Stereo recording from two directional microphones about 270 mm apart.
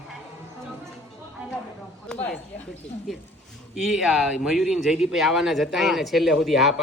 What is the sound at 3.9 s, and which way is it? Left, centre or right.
Speech, centre.